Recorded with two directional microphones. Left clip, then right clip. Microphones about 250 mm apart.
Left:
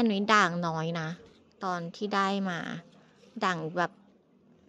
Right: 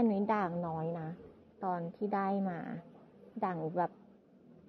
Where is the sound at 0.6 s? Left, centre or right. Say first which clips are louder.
Left 6 dB; left.